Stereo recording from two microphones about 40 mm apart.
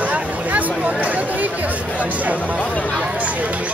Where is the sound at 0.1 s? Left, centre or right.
Right.